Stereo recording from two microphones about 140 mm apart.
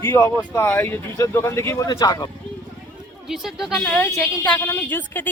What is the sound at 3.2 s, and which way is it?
A woman's voice, centre (ahead or behind).